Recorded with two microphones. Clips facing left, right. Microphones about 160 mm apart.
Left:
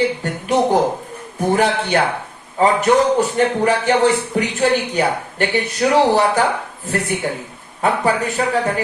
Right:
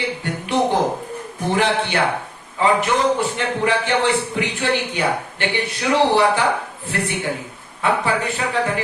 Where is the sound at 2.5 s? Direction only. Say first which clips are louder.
Left 4 dB; 40° left (ahead or behind).